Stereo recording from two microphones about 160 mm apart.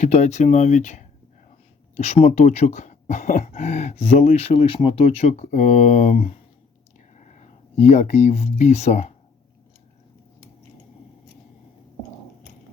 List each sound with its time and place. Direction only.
0.0 s speech: 45° left (ahead or behind)